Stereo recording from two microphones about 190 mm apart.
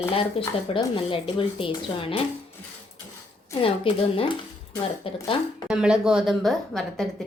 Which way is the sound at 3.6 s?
30° left (ahead or behind).